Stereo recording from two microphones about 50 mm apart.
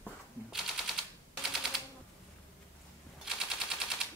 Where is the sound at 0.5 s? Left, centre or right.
Centre.